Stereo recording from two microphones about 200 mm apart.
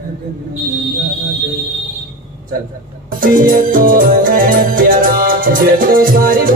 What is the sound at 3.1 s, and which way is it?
Music, 45° right (ahead or behind).